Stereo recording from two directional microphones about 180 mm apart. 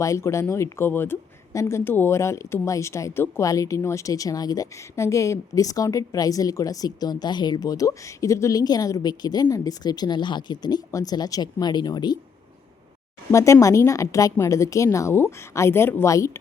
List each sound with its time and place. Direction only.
0.0 s speech: 15° left (ahead or behind)
13.3 s a woman's voice: 15° left (ahead or behind)